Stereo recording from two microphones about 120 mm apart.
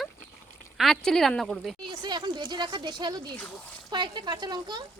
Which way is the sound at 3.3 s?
15° left (ahead or behind).